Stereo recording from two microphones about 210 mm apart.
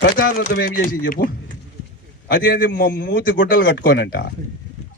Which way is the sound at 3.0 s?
55° left (ahead or behind).